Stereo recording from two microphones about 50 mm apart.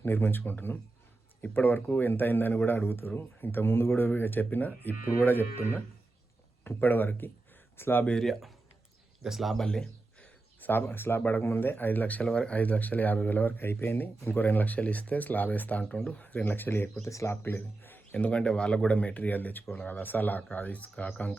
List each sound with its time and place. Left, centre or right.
0.0 s speech: left
6.7 s speech: left
7.8 s speech: left
8.2 s speech: centre
9.6 s a sound: centre
10.6 s speech: left
12.2 s speech: centre
12.5 s speech: left
17.0 s speech: left
17.4 s speech: left
18.1 s speech: left